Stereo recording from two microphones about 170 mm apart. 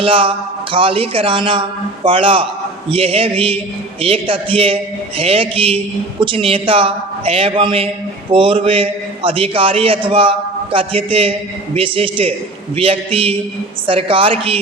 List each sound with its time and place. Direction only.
0.0 s a man's voice: 30° right (ahead or behind)